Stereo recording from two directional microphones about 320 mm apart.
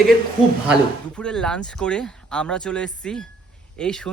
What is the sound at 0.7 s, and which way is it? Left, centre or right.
Speech, centre.